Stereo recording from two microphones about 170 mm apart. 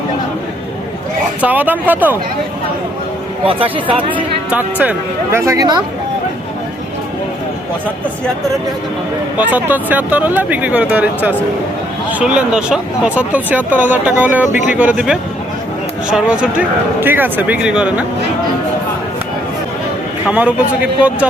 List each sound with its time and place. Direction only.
1.4 s speech: 10° right (ahead or behind)
3.4 s speech: 30° right (ahead or behind)
4.4 s speech: 10° right (ahead or behind)
9.5 s speech: 10° right (ahead or behind)
20.2 s speech: 10° right (ahead or behind)